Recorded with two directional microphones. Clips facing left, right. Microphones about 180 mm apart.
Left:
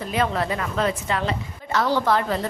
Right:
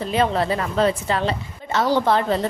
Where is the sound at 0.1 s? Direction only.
30° right (ahead or behind).